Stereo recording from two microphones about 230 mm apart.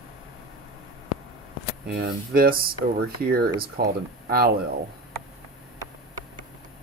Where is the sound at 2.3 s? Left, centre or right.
Right.